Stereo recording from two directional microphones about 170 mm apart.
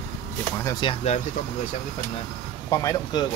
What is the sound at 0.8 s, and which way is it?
Speech, 40° left (ahead or behind).